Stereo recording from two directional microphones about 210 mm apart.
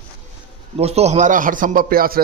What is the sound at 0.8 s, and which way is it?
A man's voice, 30° right (ahead or behind).